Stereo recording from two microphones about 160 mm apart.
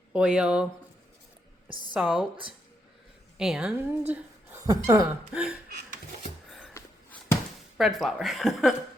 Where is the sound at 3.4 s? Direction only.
5° right (ahead or behind).